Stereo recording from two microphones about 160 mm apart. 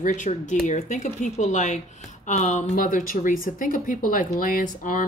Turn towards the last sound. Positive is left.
turn(degrees=55)  # may be behind; listen again after turning